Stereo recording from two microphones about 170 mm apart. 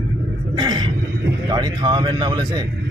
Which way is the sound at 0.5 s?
25° right (ahead or behind).